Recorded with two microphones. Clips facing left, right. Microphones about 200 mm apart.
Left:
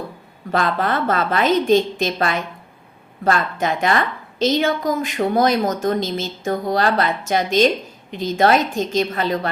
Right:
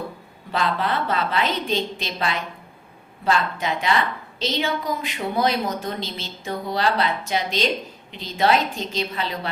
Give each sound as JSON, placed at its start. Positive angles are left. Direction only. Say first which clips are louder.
{"t": 0.5, "sound": "a woman's voice", "louder": "left 4 dB", "side_deg": 50}